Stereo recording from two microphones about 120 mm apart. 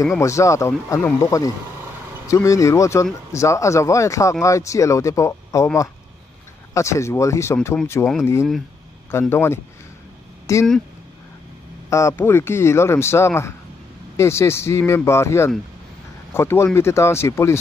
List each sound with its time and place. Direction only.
0.2 s speech: 25° left (ahead or behind)
6.7 s speech: 25° left (ahead or behind)
9.3 s speech: 20° left (ahead or behind)
11.9 s speech: 25° left (ahead or behind)